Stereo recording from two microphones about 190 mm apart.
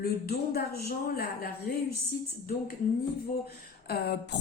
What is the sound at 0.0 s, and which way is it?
A woman's voice, 55° left (ahead or behind).